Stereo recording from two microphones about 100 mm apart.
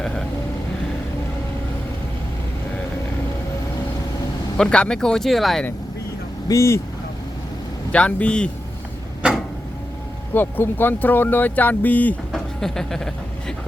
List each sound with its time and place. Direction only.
4.5 s speech: 10° left (ahead or behind)
6.5 s speech: 30° left (ahead or behind)
7.9 s speech: 10° left (ahead or behind)
10.3 s speech: 20° left (ahead or behind)
12.3 s speech: 5° left (ahead or behind)